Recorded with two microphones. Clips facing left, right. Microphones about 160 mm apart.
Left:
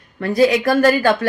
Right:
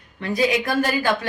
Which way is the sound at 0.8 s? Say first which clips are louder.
Left 7 dB; 45° left (ahead or behind).